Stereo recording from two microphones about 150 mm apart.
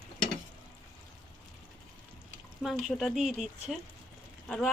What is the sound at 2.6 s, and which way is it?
Speech, centre (ahead or behind).